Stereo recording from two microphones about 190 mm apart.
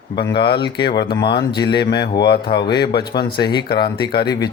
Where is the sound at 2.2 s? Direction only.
55° left (ahead or behind).